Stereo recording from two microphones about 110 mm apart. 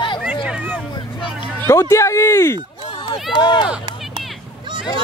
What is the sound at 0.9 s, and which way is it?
Vehicle, 50° left (ahead or behind).